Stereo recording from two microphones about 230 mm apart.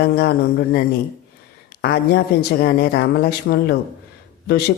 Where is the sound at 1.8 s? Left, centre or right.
Left.